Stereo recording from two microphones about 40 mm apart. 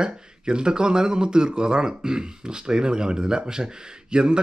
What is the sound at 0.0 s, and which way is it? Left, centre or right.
Speech, centre.